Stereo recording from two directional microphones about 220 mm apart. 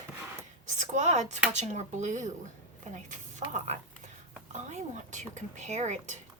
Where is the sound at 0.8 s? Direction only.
30° right (ahead or behind).